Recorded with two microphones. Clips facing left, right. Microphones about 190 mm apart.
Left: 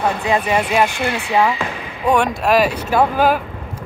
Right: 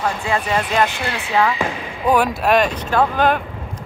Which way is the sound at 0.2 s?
15° left (ahead or behind).